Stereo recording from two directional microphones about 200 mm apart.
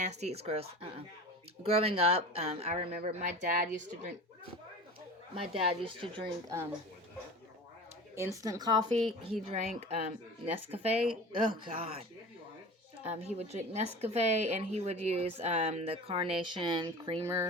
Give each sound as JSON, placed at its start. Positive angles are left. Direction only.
{"t": 0.4, "sound": "speech", "side_deg": -30}
{"t": 5.3, "sound": "speech", "side_deg": -30}
{"t": 8.4, "sound": "speech", "side_deg": -20}
{"t": 9.5, "sound": "speech", "side_deg": -35}